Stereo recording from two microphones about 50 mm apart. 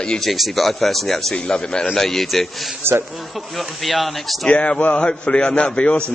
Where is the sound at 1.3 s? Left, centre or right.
Centre.